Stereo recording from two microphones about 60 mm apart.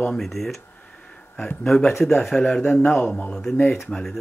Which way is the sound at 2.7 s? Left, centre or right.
Left.